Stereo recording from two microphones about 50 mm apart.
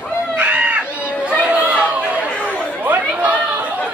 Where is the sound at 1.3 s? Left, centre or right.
Right.